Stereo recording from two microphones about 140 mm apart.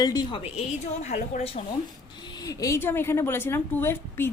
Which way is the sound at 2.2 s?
30° left (ahead or behind).